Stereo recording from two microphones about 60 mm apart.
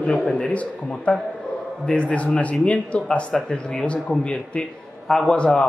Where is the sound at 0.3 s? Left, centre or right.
Centre.